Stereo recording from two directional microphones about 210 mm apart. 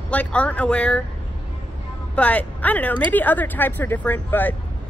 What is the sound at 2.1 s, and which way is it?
Speech, 5° left (ahead or behind).